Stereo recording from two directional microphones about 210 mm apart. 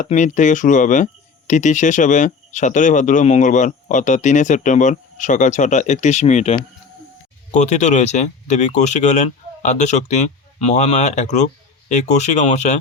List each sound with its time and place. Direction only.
0.0 s speech: 35° left (ahead or behind)